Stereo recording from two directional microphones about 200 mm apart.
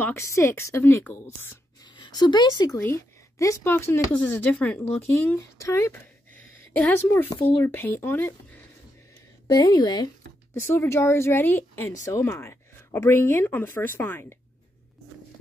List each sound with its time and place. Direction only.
0.0 s speech: 15° left (ahead or behind)
2.0 s a woman's voice: 20° left (ahead or behind)